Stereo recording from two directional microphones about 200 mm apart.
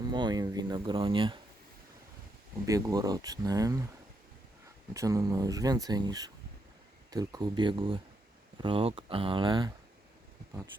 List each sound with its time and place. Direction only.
0.0 s speech: 20° right (ahead or behind)
2.6 s speech: 15° right (ahead or behind)
4.9 s speech: 15° right (ahead or behind)